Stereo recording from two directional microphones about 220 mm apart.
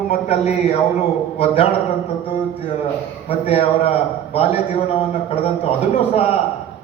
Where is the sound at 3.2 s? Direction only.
25° left (ahead or behind).